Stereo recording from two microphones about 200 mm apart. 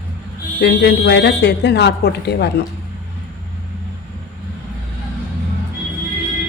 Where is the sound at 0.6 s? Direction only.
55° left (ahead or behind).